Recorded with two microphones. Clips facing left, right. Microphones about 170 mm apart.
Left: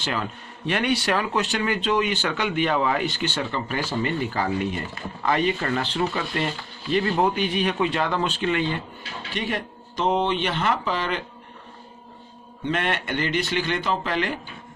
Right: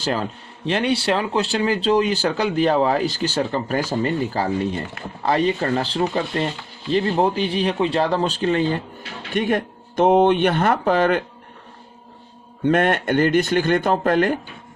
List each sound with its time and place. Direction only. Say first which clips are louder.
0.0 s speech: right 5 dB; 35° right (ahead or behind)
9.3 s speech: right 8 dB; 50° right (ahead or behind)
12.6 s speech: right 8 dB; 50° right (ahead or behind)